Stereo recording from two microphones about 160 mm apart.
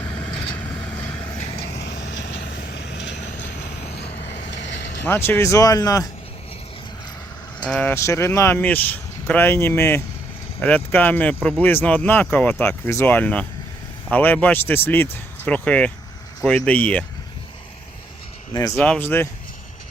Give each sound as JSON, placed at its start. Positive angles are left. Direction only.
{"t": 0.0, "sound": "vehicle", "side_deg": 30}
{"t": 1.7, "sound": "vehicle", "side_deg": 90}
{"t": 5.0, "sound": "speech", "side_deg": 15}
{"t": 7.7, "sound": "speech", "side_deg": 10}
{"t": 18.8, "sound": "speech", "side_deg": 10}